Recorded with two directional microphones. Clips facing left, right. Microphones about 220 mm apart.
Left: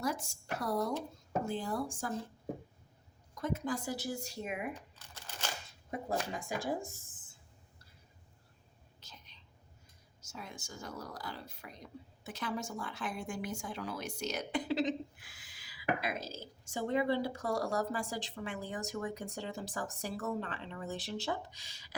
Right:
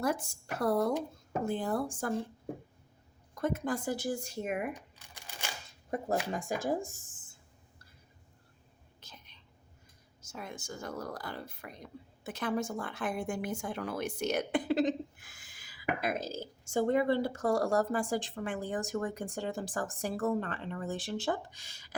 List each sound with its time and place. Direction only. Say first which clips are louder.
0.0 s a woman's voice: right 4 dB; 55° right (ahead or behind)
3.3 s speech: right 3 dB; 55° right (ahead or behind)
5.1 s a sound: left 1 dB; 15° right (ahead or behind)
6.1 s speech: right 4 dB; 45° right (ahead or behind)
9.0 s whispering: right 2 dB; 55° right (ahead or behind)
10.2 s speech: right 4 dB; 55° right (ahead or behind)